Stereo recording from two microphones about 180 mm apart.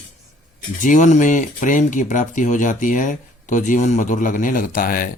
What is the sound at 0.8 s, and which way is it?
Speech, 45° left (ahead or behind).